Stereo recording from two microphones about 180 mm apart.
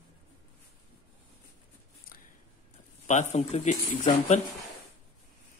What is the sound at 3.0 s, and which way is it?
A man's voice, 40° left (ahead or behind).